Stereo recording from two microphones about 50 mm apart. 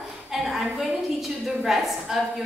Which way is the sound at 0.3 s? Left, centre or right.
Centre.